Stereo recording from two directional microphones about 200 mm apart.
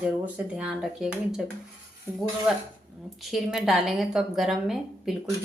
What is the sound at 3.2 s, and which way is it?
Speech, centre (ahead or behind).